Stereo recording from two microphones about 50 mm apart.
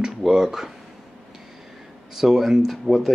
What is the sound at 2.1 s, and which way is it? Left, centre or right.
Speech, centre.